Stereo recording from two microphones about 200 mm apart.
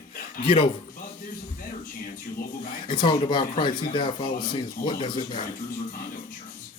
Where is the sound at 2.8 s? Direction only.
25° left (ahead or behind).